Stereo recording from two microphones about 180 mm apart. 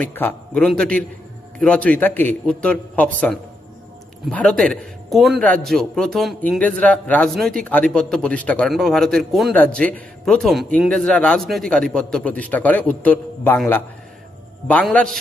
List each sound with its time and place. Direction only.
0.1 s a man's voice: 10° left (ahead or behind)
4.3 s a man's voice: 5° left (ahead or behind)
14.7 s a man's voice: 10° left (ahead or behind)